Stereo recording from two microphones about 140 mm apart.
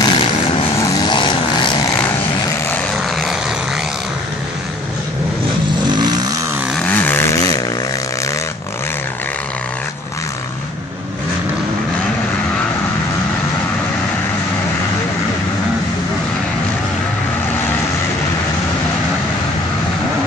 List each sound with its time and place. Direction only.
0.0 s vehicle: 35° left (ahead or behind)
5.9 s vehicle: 30° right (ahead or behind)
6.7 s vehicle: 10° left (ahead or behind)